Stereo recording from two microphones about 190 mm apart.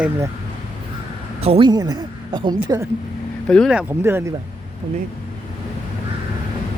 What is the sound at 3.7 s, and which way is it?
Speech, 10° right (ahead or behind).